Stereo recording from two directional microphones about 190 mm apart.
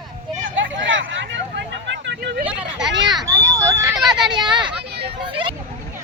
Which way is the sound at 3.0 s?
20° right (ahead or behind).